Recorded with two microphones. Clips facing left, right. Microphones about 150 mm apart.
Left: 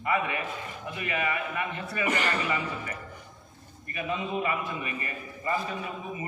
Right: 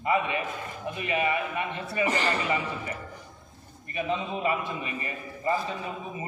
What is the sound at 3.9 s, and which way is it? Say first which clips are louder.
A man's voice: right 1 dB; 25° right (ahead or behind).